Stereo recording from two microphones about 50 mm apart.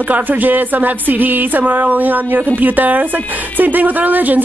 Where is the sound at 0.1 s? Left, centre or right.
Right.